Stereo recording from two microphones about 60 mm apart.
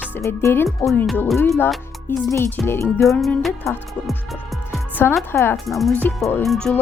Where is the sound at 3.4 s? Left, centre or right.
Centre.